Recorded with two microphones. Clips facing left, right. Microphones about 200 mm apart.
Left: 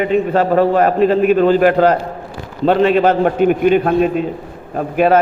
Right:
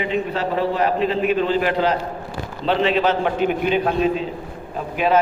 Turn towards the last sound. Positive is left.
turn(degrees=50)  # may be behind; listen again after turning